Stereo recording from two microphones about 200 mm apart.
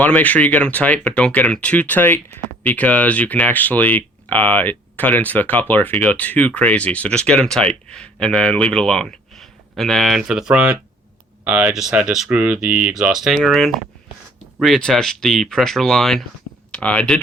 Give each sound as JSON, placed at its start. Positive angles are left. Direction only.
{"t": 0.0, "sound": "speech", "side_deg": 5}